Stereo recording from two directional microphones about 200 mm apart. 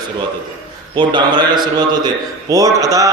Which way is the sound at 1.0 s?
20° right (ahead or behind).